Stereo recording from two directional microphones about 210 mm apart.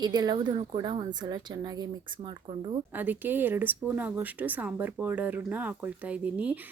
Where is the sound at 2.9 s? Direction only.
10° right (ahead or behind).